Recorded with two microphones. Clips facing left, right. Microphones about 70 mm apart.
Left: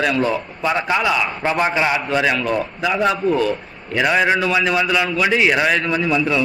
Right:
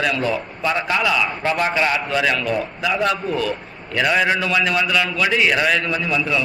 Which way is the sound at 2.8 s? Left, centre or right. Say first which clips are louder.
Left 3 dB; centre.